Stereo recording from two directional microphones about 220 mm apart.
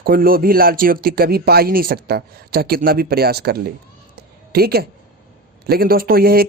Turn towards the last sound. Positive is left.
turn(degrees=-45)  # may be behind; listen again after turning